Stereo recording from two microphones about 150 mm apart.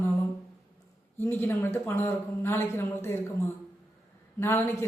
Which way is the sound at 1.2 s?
15° left (ahead or behind).